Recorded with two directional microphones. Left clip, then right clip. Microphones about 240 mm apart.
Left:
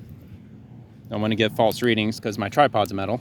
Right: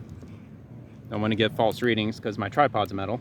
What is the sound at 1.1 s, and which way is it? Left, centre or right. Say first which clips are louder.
Speech: left 2 dB; centre.